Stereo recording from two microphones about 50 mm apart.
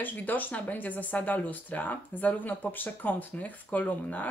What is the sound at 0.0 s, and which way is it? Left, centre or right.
Speech, left.